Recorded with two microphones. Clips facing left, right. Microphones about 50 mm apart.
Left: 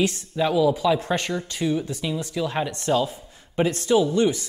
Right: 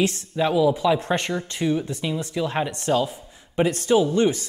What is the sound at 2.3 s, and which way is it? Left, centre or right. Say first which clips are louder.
Speech: right 1 dB; right.